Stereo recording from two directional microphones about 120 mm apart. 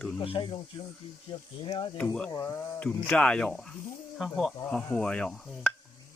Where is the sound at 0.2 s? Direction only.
45° left (ahead or behind).